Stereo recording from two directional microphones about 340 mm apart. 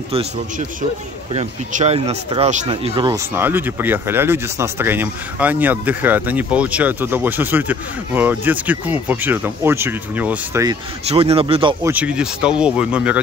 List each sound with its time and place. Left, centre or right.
0.1 s speech: centre